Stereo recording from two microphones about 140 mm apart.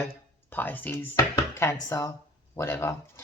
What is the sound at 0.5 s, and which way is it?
Speech, 15° left (ahead or behind).